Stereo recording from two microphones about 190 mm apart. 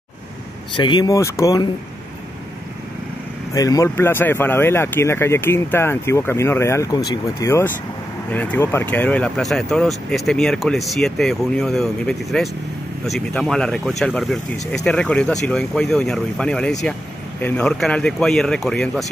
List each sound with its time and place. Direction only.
0.7 s speech: 25° left (ahead or behind)
3.5 s speech: 20° left (ahead or behind); by 19.0 s centre (ahead or behind)